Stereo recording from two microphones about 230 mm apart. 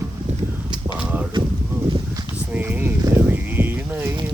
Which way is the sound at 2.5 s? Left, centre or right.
Centre.